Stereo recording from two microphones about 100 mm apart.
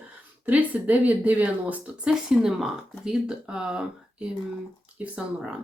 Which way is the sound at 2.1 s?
5° right (ahead or behind).